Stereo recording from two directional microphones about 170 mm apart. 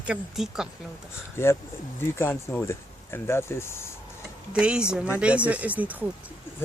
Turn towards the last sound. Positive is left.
turn(degrees=-10)  # may be behind; listen again after turning